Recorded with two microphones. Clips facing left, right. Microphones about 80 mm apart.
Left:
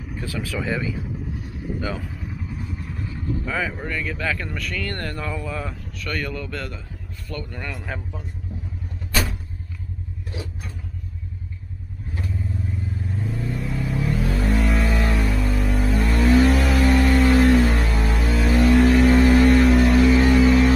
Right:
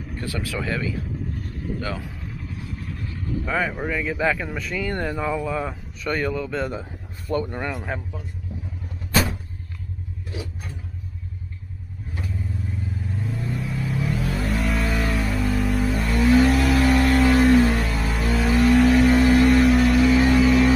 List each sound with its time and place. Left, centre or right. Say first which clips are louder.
0.3 s speech: even; centre
0.7 s vehicle: left 1 dB; centre
3.4 s speech: right 4 dB; centre
7.4 s speech: right 5 dB; right
7.7 s speech: right 2 dB; centre
13.1 s vehicle: left 1 dB; centre